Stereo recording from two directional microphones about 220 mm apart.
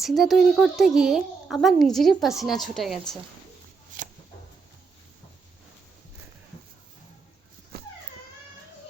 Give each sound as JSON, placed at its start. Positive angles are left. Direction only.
{"t": 0.0, "sound": "speech", "side_deg": 0}
{"t": 3.9, "sound": "a sound", "side_deg": -35}
{"t": 7.7, "sound": "dog", "side_deg": -45}